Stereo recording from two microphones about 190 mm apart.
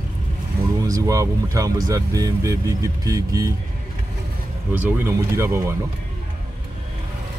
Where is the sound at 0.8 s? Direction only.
15° right (ahead or behind).